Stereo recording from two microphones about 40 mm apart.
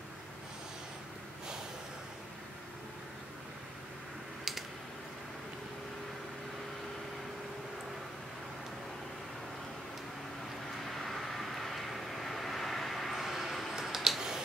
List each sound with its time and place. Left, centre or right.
10.9 s vehicle: centre